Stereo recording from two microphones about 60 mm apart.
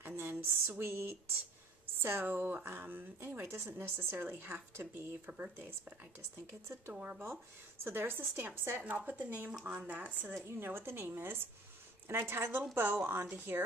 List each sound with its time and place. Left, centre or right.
0.0 s a sound: right
2.0 s speech: right
3.4 s speech: right
5.2 s speech: right
7.8 s speech: right
10.4 s speech: right